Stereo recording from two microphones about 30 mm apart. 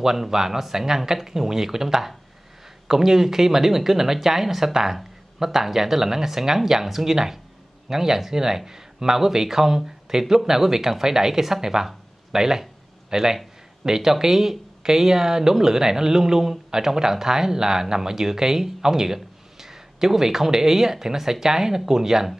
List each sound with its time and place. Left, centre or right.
0.0 s speech: centre